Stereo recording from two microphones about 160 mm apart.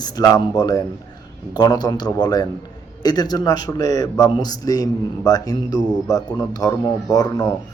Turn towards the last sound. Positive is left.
turn(degrees=25)  # may be behind; listen again after turning